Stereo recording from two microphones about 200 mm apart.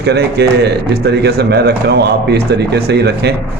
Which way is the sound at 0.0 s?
55° right (ahead or behind).